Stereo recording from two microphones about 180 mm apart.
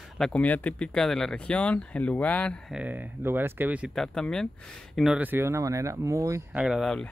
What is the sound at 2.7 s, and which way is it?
Speech, 10° right (ahead or behind).